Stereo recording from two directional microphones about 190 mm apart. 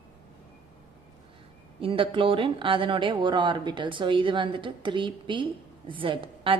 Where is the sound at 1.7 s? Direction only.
25° right (ahead or behind).